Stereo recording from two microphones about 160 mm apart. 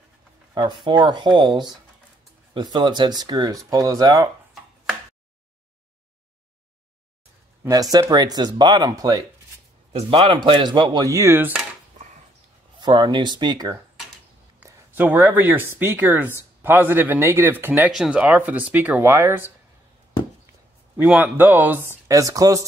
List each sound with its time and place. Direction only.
0.6 s speech: 25° right (ahead or behind)
7.6 s speech: 20° right (ahead or behind)
9.9 s speech: 35° right (ahead or behind); by 11.6 s 10° right (ahead or behind)
12.8 s speech: 30° right (ahead or behind)
14.6 s speech: 10° right (ahead or behind)
21.0 s speech: 10° right (ahead or behind)